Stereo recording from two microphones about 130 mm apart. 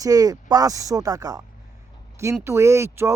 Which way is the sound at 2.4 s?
20° right (ahead or behind).